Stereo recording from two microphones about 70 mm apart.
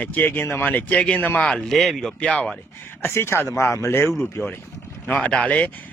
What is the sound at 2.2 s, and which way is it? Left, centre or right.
Speech, centre.